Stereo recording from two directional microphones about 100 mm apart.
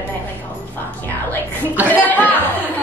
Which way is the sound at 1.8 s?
15° left (ahead or behind).